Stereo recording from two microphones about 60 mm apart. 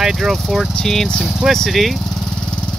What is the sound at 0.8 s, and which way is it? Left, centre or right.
Speech, centre.